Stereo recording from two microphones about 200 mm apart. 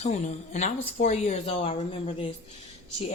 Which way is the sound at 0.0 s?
35° left (ahead or behind).